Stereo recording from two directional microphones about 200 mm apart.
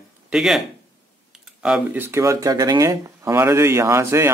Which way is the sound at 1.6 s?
5° right (ahead or behind).